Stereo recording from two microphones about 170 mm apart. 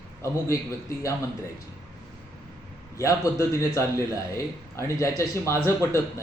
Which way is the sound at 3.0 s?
15° left (ahead or behind).